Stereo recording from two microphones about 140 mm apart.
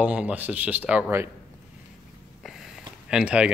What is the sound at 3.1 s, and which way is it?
Speech, 5° right (ahead or behind).